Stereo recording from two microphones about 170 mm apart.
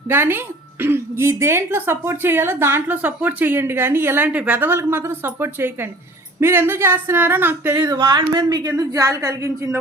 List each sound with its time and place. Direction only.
0.1 s a woman's voice: 15° right (ahead or behind)
7.9 s a woman's voice: 25° right (ahead or behind)